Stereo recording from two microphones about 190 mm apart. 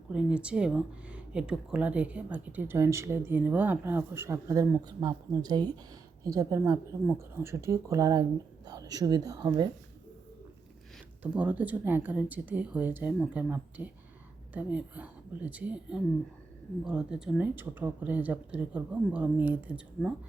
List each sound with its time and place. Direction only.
0.1 s speech: 5° right (ahead or behind); by 9.6 s 20° right (ahead or behind)
11.2 s speech: 10° right (ahead or behind)